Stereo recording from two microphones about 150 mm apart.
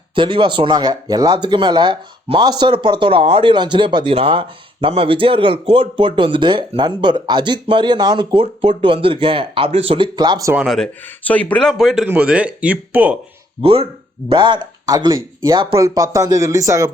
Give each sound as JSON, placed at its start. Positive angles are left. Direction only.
{"t": 0.2, "sound": "speech", "side_deg": -35}
{"t": 10.5, "sound": "speech", "side_deg": -5}
{"t": 11.3, "sound": "speech", "side_deg": 10}
{"t": 11.7, "sound": "speech", "side_deg": 0}
{"t": 13.6, "sound": "speech", "side_deg": -40}